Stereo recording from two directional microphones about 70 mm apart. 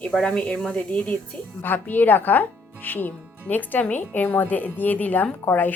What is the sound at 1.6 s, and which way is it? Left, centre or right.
Speech, left.